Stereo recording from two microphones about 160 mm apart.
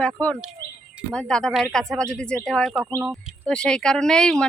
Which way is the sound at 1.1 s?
5° left (ahead or behind).